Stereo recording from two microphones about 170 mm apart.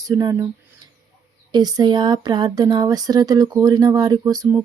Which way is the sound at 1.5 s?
25° right (ahead or behind).